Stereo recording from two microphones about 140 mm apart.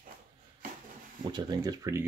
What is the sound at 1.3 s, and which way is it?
Speech, 30° right (ahead or behind).